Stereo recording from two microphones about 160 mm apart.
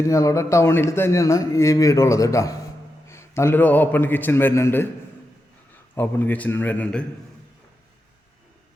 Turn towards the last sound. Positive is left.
turn(degrees=5)  # may be behind; listen again after turning